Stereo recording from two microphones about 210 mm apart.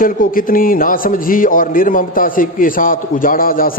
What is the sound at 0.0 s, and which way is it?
A man's voice, 40° left (ahead or behind).